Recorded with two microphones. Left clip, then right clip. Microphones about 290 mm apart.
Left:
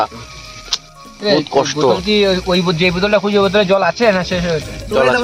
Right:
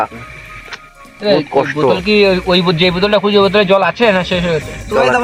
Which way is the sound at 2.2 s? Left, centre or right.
Right.